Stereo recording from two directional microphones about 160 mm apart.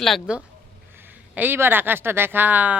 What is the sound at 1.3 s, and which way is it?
Speech, 15° right (ahead or behind).